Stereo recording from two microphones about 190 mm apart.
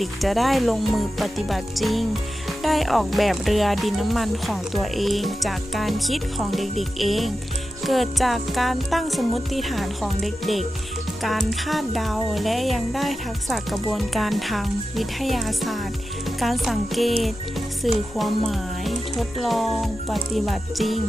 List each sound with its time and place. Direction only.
0.0 s speech: centre (ahead or behind)